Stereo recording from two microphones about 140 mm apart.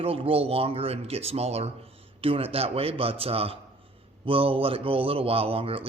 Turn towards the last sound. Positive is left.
turn(degrees=-40)  # may be behind; listen again after turning